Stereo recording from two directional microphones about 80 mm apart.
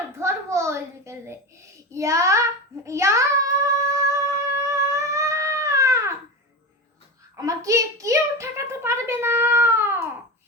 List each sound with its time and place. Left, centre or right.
0.2 s a sound: right
1.9 s child singing: right
7.3 s a woman's voice: right